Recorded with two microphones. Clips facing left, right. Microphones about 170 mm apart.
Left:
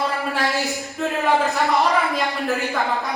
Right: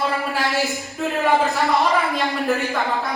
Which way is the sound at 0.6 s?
20° left (ahead or behind).